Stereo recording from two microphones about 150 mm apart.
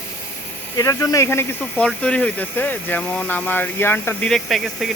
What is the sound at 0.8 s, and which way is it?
Speech, 25° left (ahead or behind).